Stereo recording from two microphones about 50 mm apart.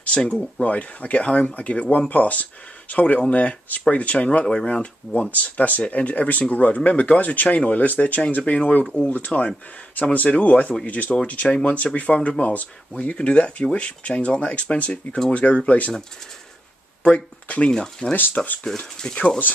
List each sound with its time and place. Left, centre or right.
0.0 s speech: left
11.4 s speech: centre
17.0 s speech: left
17.7 s speech: centre
18.3 s speech: left